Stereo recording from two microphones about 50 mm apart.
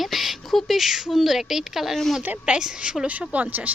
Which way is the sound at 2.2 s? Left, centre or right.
Right.